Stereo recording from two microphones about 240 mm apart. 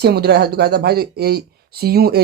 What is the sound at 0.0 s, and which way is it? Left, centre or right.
Speech, right.